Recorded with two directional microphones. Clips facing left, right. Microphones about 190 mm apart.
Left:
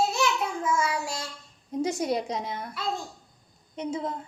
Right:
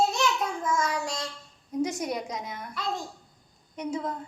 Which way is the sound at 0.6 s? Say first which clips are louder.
Left 1 dB; 10° left (ahead or behind).